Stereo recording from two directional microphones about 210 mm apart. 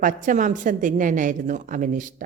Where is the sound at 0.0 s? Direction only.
40° right (ahead or behind).